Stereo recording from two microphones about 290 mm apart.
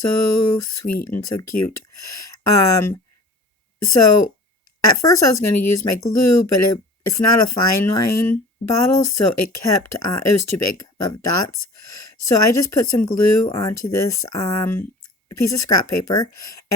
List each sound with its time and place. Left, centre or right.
0.0 s speech: left